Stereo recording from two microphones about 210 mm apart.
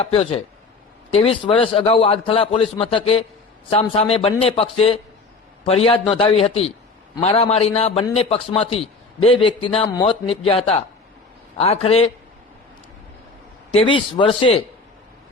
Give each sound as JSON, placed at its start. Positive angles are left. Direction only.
{"t": 0.0, "sound": "a man's voice", "side_deg": 30}
{"t": 13.7, "sound": "a man's voice", "side_deg": 25}